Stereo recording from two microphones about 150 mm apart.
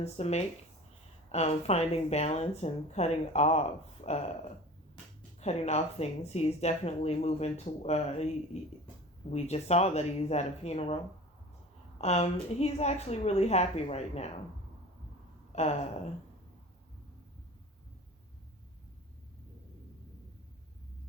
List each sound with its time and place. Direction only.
0.0 s speech: 45° left (ahead or behind)
15.5 s speech: 45° left (ahead or behind)